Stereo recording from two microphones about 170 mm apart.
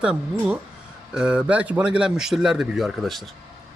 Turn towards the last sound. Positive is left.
turn(degrees=0)  # may be behind; listen again after turning